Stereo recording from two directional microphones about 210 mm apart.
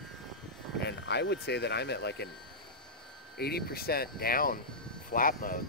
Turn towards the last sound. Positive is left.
turn(degrees=40)  # may be behind; listen again after turning